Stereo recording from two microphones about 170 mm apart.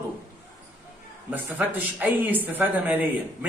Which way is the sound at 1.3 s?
10° right (ahead or behind).